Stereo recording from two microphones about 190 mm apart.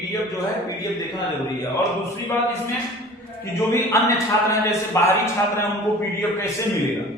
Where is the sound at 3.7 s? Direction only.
15° left (ahead or behind).